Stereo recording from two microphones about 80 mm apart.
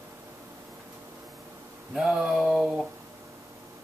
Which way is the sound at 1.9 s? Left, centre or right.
Centre.